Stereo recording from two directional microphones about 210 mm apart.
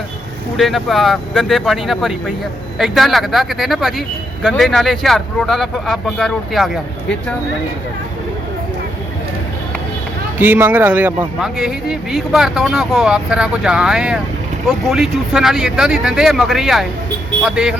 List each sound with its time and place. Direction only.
0.5 s speech: centre (ahead or behind)
10.3 s speech: 10° right (ahead or behind)